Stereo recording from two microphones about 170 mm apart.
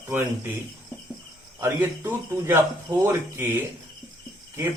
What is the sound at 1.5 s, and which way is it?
Speech, 15° right (ahead or behind).